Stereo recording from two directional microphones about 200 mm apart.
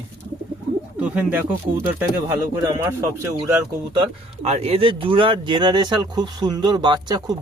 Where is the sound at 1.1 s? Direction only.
10° right (ahead or behind).